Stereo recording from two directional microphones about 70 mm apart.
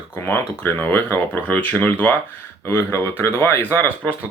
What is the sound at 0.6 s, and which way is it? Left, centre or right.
Speech, left.